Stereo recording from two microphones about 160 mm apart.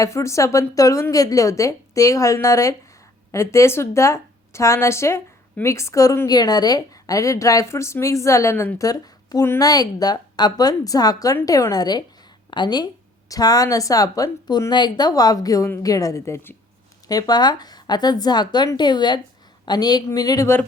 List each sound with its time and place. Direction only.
0.0 s a woman's voice: 20° left (ahead or behind)